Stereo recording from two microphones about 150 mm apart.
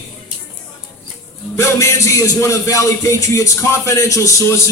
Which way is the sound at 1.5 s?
20° left (ahead or behind).